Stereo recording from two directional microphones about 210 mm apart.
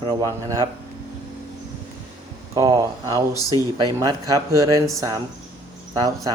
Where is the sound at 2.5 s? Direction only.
15° right (ahead or behind).